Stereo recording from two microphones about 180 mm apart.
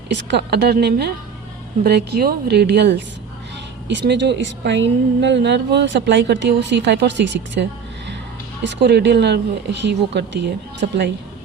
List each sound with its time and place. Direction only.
0.1 s a woman's voice: 70° right (ahead or behind)